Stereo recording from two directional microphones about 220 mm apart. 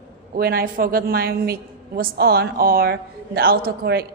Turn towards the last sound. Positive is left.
turn(degrees=-45)  # may be behind; listen again after turning